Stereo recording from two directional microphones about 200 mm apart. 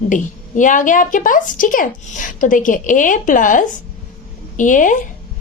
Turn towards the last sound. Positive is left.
turn(degrees=40)  # may be behind; listen again after turning